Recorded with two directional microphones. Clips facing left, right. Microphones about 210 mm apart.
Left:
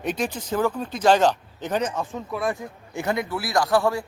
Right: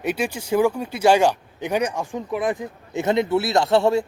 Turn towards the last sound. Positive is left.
turn(degrees=-25)  # may be behind; listen again after turning